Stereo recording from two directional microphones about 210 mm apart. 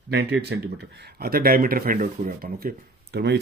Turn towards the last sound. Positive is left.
turn(degrees=-50)  # may be behind; listen again after turning